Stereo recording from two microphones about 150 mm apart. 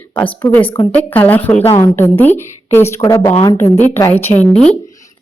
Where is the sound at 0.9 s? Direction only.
10° left (ahead or behind).